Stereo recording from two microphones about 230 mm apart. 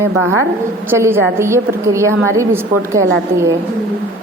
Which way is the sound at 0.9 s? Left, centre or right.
Centre.